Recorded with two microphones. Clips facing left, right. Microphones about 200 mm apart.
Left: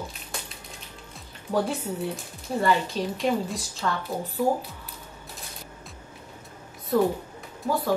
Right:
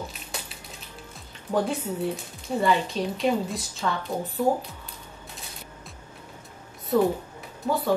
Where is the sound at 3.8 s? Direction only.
5° right (ahead or behind).